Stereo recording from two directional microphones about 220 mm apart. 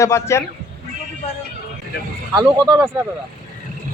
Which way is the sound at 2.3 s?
20° right (ahead or behind).